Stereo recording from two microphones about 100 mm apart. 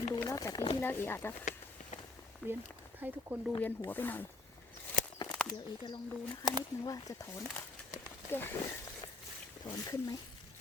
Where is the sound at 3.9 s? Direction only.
20° left (ahead or behind).